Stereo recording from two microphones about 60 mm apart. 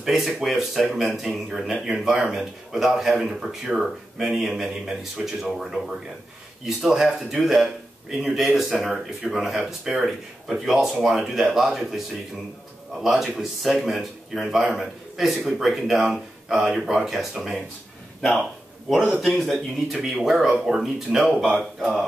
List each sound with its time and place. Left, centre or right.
0.0 s speech: centre
13.0 s speech: centre
18.9 s a man's voice: centre